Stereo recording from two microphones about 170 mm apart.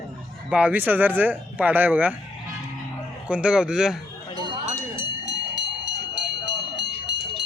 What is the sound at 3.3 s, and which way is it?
Speech, 5° right (ahead or behind).